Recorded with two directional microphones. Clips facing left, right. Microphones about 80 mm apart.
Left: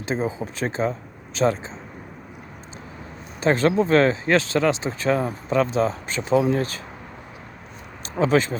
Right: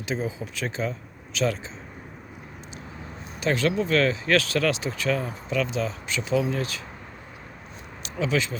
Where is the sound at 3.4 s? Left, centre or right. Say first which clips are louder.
Left 5 dB; left.